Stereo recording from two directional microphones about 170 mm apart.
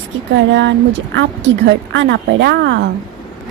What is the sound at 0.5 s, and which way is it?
Speech, 90° right.